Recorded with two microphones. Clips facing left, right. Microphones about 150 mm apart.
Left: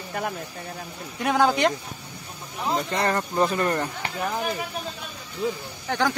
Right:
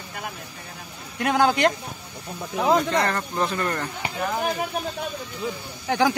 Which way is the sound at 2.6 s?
80° right.